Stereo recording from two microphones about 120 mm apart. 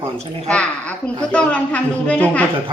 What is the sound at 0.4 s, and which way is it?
A woman's voice, 10° left (ahead or behind).